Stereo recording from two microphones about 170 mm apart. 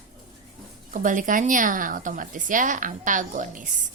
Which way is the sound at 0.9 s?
50° right (ahead or behind).